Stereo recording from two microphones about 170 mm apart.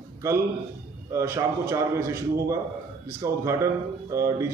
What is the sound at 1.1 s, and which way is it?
A man's voice, 15° right (ahead or behind).